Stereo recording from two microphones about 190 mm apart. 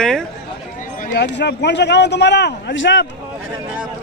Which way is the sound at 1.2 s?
65° left (ahead or behind).